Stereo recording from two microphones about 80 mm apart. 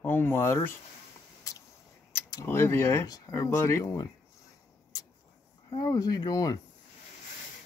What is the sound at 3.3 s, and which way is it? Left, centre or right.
Speech, left.